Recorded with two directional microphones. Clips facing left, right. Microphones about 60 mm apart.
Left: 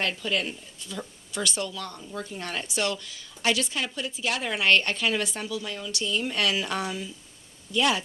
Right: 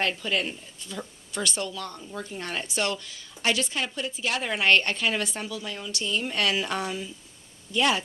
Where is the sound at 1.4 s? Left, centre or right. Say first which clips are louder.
Even; right.